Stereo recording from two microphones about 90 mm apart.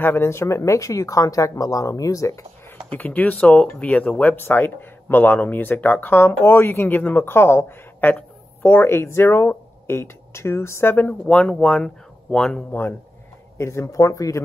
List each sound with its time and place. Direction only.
0.0 s speech: 25° left (ahead or behind)
2.9 s speech: 20° left (ahead or behind)
13.6 s speech: 30° left (ahead or behind)